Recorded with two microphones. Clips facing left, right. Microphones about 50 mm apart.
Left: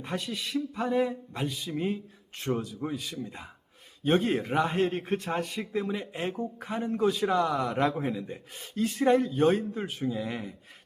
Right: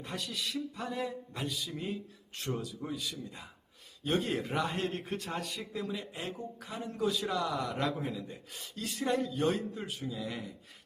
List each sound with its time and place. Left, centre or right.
0.0 s a man's voice: left